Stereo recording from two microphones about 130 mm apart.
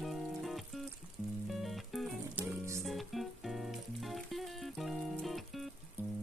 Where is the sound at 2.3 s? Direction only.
20° right (ahead or behind).